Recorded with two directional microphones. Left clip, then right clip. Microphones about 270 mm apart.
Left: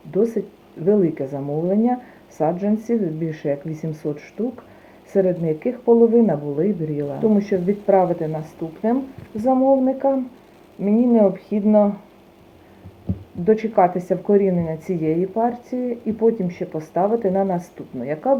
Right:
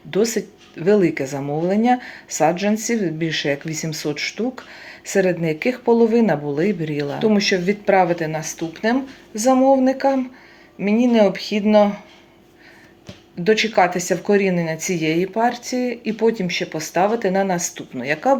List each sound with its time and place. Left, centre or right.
0.1 s speech: right
13.4 s speech: right